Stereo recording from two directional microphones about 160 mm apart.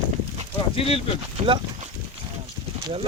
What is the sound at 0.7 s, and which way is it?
Speech, 35° left (ahead or behind).